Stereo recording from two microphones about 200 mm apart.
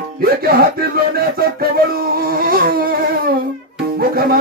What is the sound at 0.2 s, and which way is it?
Music, 50° right (ahead or behind).